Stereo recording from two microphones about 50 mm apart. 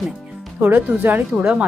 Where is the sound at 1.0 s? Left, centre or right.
Right.